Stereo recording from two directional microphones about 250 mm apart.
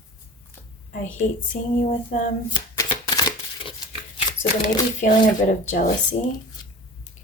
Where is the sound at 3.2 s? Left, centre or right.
Centre.